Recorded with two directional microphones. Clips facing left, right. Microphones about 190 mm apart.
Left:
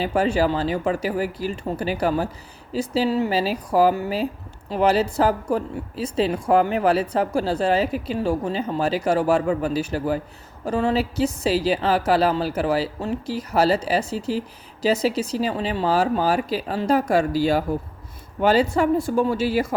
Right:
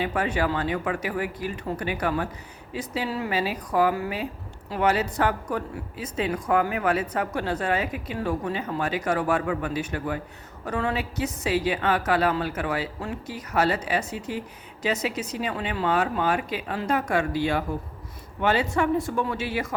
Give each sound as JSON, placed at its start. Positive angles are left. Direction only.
{"t": 0.0, "sound": "speech", "side_deg": 30}